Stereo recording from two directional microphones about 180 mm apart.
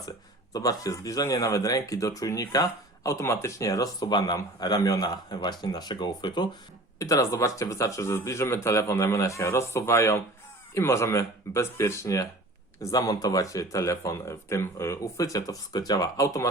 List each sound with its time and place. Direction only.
0.5 s a man's voice: 20° left (ahead or behind)